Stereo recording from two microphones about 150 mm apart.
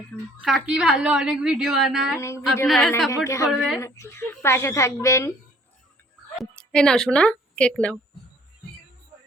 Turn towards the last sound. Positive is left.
turn(degrees=5)  # may be behind; listen again after turning